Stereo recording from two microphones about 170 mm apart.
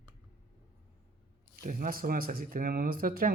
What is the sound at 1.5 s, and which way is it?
Speech, 55° right (ahead or behind).